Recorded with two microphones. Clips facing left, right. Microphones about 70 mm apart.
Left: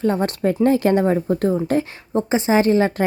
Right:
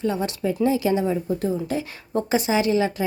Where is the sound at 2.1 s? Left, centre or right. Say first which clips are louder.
Left 4 dB; left.